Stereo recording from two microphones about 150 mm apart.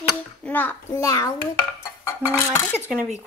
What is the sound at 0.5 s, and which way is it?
A child's voice, 15° left (ahead or behind).